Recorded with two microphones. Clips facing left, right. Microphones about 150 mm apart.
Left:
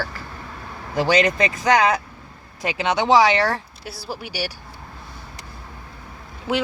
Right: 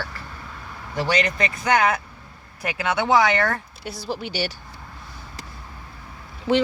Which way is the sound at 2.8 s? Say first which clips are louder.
Left 3 dB; 20° left (ahead or behind).